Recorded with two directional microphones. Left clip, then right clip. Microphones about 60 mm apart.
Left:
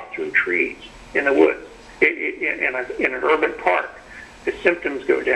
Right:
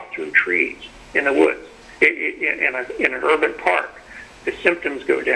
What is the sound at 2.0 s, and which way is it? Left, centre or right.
A man's voice, right.